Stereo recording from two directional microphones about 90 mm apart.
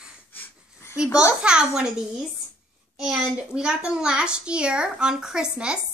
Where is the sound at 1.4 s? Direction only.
10° right (ahead or behind).